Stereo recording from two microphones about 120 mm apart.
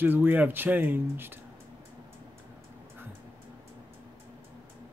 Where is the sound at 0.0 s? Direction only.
15° right (ahead or behind).